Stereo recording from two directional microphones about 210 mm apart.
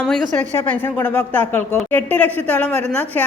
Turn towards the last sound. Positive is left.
turn(degrees=5)  # may be behind; listen again after turning